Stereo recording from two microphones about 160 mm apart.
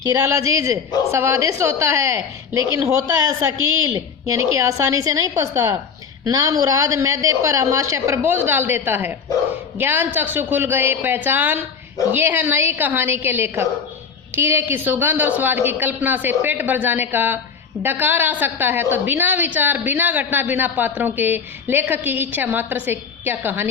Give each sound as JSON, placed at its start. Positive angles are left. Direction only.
{"t": 0.1, "sound": "a woman's voice", "side_deg": -20}